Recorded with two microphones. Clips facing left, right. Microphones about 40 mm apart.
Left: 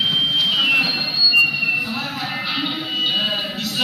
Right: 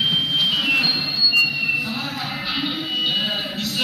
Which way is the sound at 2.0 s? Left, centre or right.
Centre.